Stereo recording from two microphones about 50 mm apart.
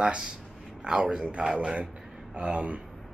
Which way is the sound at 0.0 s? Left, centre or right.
Centre.